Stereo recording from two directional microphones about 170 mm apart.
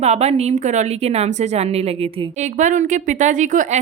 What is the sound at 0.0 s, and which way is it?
A woman's voice, 40° right (ahead or behind).